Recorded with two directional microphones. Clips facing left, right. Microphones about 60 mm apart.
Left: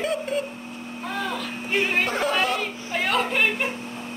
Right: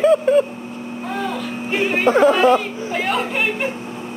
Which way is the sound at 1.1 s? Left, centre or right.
Centre.